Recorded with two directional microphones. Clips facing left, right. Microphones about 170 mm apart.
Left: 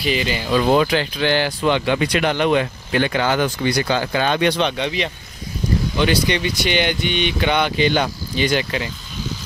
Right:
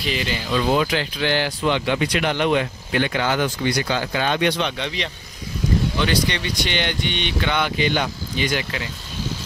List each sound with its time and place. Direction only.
0.0 s speech: 5° left (ahead or behind)
0.5 s speech: 50° left (ahead or behind); by 4.6 s 35° left (ahead or behind)
4.7 s speech: 10° left (ahead or behind)
7.5 s speech: 25° left (ahead or behind)